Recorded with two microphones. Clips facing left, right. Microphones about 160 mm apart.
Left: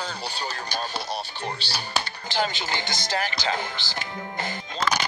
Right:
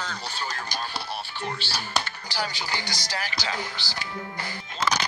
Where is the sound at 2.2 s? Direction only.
20° left (ahead or behind).